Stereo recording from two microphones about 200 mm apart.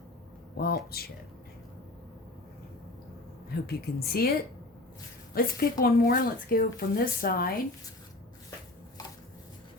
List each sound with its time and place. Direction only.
0.5 s speech: 50° left (ahead or behind)
3.5 s speech: 50° left (ahead or behind)